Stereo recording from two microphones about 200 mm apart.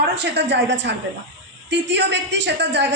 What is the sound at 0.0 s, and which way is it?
A man's voice, 55° right (ahead or behind).